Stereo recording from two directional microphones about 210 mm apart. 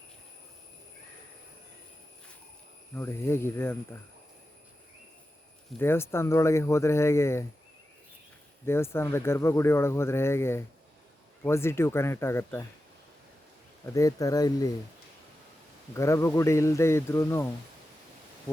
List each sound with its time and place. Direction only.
2.9 s speech: 10° left (ahead or behind)
5.8 s speech: 10° left (ahead or behind)
8.6 s speech: 10° left (ahead or behind)
13.8 s speech: 15° left (ahead or behind)
16.0 s speech: 15° left (ahead or behind)